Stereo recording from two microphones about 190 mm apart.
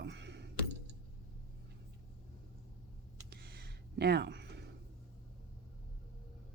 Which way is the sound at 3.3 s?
60° right (ahead or behind).